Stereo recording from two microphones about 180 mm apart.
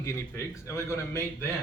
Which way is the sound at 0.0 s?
15° left (ahead or behind).